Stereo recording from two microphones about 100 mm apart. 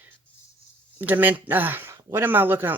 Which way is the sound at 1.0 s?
20° right (ahead or behind).